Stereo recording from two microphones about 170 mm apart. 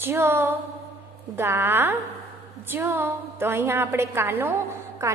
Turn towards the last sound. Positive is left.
turn(degrees=-15)  # may be behind; listen again after turning